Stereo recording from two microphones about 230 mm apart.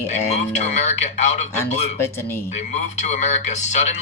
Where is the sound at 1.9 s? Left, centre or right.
Centre.